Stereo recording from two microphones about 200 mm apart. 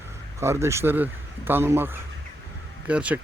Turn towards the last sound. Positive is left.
turn(degrees=-5)  # may be behind; listen again after turning